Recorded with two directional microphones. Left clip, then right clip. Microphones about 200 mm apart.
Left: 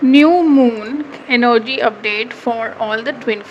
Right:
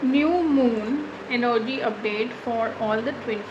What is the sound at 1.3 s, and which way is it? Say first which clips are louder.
A woman's voice: left 10 dB; 50° left (ahead or behind).